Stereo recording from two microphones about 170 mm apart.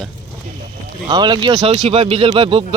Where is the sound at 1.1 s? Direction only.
25° right (ahead or behind).